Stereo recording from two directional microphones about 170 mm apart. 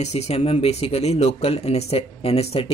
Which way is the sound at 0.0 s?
40° left (ahead or behind).